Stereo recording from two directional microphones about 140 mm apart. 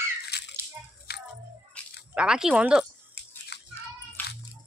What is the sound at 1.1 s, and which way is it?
Music, 90° left.